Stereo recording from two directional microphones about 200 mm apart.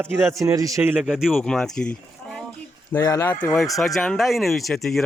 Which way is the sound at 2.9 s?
15° left (ahead or behind).